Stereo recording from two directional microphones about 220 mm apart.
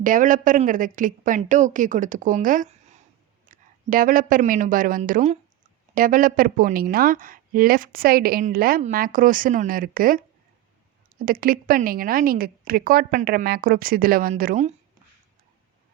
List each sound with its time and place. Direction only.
0.0 s a woman's voice: 35° right (ahead or behind)
11.3 s a woman's voice: 40° right (ahead or behind)